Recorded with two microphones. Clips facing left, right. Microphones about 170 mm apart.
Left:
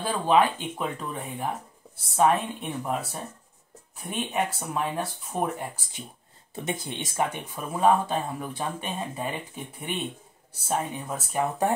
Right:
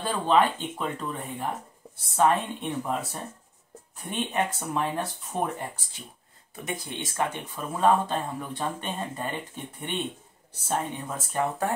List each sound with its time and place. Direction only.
0.0 s speech: 5° left (ahead or behind)
6.5 s speech: 25° left (ahead or behind)
7.2 s speech: 10° left (ahead or behind)